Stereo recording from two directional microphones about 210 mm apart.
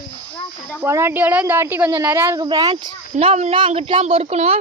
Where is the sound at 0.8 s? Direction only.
10° right (ahead or behind); by 4.5 s 30° right (ahead or behind).